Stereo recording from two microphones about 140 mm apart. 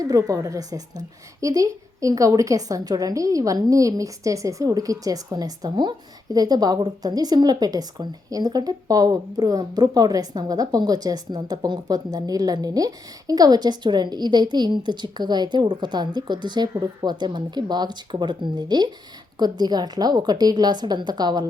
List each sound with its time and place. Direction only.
0.0 s a woman's voice: 25° right (ahead or behind)